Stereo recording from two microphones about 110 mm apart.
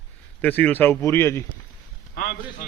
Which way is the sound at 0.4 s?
15° left (ahead or behind).